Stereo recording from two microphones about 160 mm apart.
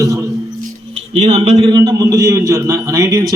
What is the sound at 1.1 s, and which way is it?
Speech, 45° right (ahead or behind).